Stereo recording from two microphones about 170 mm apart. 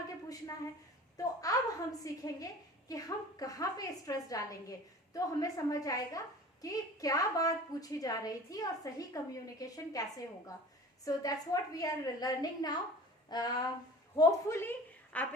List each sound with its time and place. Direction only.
1.1 s a woman's voice: 20° left (ahead or behind)